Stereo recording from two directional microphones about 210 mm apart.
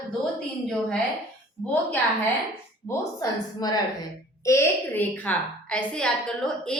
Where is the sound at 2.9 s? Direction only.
15° left (ahead or behind).